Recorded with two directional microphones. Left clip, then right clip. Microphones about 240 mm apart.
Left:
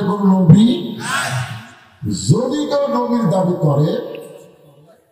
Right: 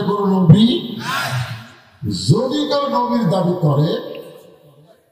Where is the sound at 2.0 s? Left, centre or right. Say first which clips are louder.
Even; right.